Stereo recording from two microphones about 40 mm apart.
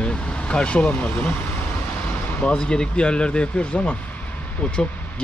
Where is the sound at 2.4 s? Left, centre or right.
Left.